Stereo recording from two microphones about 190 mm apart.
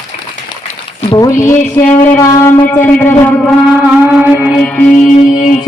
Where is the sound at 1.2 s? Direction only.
15° left (ahead or behind).